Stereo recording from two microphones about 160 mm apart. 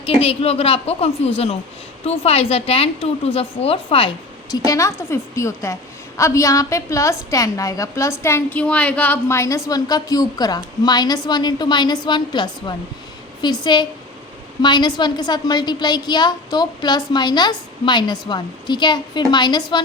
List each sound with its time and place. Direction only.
0.0 s a woman's voice: 35° left (ahead or behind)
4.5 s a woman's voice: 20° left (ahead or behind)